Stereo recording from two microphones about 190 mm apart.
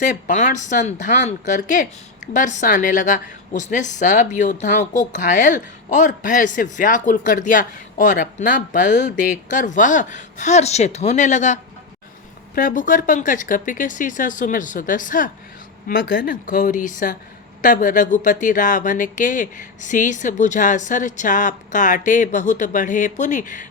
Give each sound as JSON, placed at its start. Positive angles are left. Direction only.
{"t": 0.0, "sound": "a woman's voice", "side_deg": 40}